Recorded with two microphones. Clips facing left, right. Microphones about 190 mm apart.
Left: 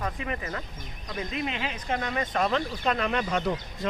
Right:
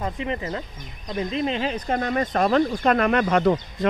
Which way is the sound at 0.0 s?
25° right (ahead or behind).